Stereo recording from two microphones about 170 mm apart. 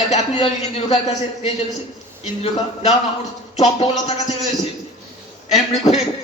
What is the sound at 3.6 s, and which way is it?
Speech, 35° left (ahead or behind).